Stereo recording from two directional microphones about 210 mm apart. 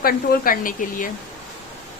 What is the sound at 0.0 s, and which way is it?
A woman's voice, 45° left (ahead or behind).